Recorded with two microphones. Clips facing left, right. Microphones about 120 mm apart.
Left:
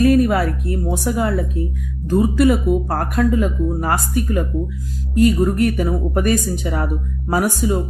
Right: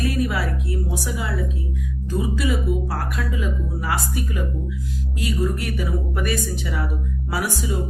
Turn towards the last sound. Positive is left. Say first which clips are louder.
# left 7 dB
turn(degrees=45)  # may be behind; listen again after turning